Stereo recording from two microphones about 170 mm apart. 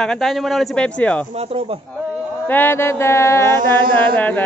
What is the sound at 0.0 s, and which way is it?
Speech, centre (ahead or behind).